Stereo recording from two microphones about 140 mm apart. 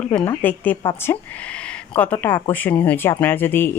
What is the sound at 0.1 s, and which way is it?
Speech, 10° left (ahead or behind).